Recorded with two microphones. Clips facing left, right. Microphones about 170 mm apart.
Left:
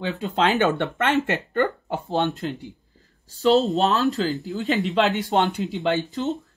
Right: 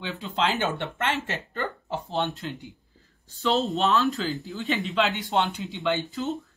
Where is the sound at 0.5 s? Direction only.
65° left (ahead or behind).